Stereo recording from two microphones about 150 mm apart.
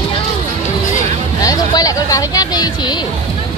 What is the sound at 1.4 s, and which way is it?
Speech, 25° left (ahead or behind).